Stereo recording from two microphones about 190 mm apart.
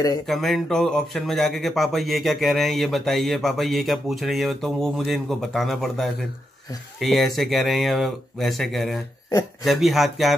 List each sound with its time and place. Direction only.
0.3 s speech: centre (ahead or behind)